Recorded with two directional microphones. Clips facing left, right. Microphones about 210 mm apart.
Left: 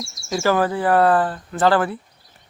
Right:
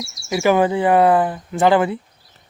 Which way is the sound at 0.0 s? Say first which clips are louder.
Right 2 dB; 50° left (ahead or behind).